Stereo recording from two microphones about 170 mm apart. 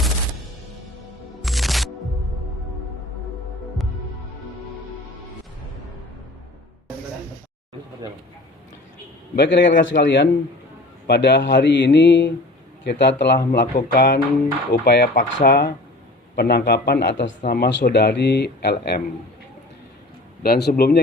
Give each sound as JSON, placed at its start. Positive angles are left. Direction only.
{"t": 1.4, "sound": "music", "side_deg": 0}
{"t": 9.3, "sound": "a man's voice", "side_deg": 85}
{"t": 15.1, "sound": "speech", "side_deg": 50}
{"t": 16.3, "sound": "speech", "side_deg": 75}
{"t": 17.4, "sound": "speech", "side_deg": 65}
{"t": 20.4, "sound": "speech", "side_deg": 70}